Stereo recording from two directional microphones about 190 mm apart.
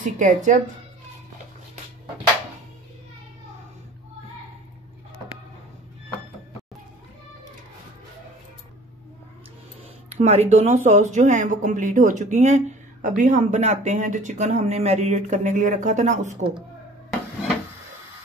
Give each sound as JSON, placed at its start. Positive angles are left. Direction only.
{"t": 0.0, "sound": "speech", "side_deg": -40}
{"t": 10.1, "sound": "speech", "side_deg": -35}